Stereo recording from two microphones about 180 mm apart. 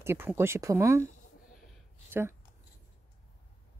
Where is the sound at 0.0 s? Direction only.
15° right (ahead or behind).